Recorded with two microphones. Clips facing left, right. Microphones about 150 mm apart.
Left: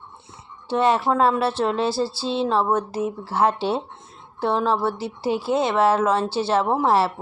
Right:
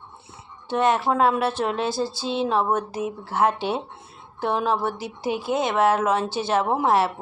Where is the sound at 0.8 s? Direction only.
Centre (ahead or behind).